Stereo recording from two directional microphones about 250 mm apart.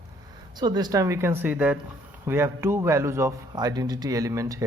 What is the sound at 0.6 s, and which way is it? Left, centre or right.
Speech, centre.